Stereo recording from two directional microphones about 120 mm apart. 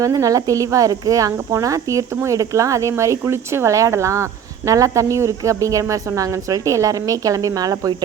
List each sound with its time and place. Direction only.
0.0 s speech: 30° right (ahead or behind)